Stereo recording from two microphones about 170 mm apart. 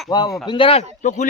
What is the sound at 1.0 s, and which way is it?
Speech, 45° left (ahead or behind).